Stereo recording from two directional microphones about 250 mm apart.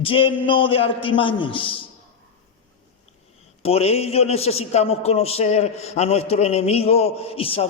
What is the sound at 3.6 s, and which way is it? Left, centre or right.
A man's voice, left.